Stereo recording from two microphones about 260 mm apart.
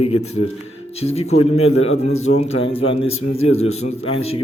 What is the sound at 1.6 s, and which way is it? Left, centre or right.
Speech, left.